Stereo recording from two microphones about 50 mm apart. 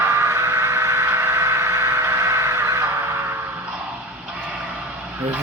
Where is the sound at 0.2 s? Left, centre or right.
Right.